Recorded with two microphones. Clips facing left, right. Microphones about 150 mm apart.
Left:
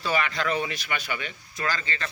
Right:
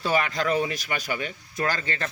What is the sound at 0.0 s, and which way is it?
Speech, 45° right (ahead or behind).